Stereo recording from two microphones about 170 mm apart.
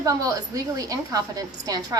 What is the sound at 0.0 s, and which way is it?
A woman's voice, 20° right (ahead or behind).